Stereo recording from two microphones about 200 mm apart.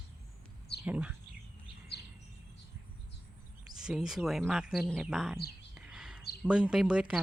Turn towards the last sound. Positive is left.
turn(degrees=-5)  # may be behind; listen again after turning